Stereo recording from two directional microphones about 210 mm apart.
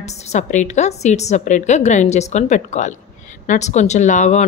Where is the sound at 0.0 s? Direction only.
30° left (ahead or behind).